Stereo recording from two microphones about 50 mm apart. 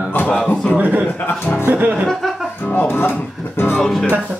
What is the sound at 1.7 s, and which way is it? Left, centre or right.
Music, right.